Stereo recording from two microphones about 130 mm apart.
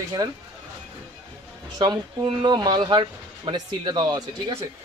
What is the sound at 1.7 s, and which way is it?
Speech, 35° right (ahead or behind).